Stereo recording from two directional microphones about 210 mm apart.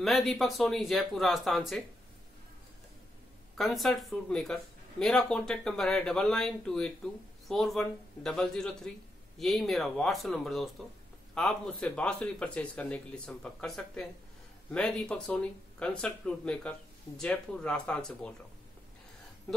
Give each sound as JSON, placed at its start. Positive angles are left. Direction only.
{"t": 0.0, "sound": "speech", "side_deg": 0}
{"t": 3.5, "sound": "speech", "side_deg": 0}